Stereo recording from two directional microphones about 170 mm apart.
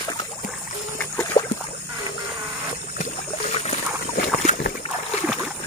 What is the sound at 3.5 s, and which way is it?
Boat, 40° left (ahead or behind).